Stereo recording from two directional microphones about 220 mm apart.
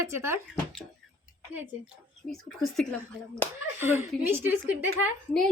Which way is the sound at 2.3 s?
Centre (ahead or behind).